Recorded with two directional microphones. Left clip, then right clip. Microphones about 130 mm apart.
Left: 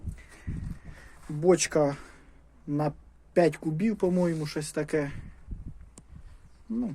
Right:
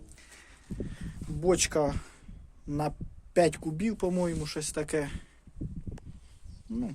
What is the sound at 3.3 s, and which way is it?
Speech, 20° right (ahead or behind).